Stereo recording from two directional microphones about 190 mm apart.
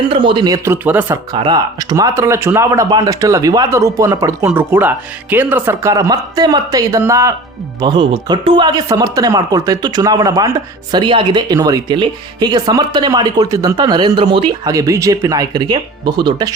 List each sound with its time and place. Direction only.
0.1 s speech: 25° right (ahead or behind); by 1.2 s 10° right (ahead or behind)
1.3 s speech: 20° right (ahead or behind)